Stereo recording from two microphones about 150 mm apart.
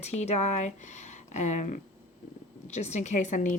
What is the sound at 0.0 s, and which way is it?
Speech, 45° left (ahead or behind).